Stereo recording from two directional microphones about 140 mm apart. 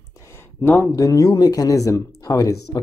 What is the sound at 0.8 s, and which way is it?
Speech, 25° left (ahead or behind).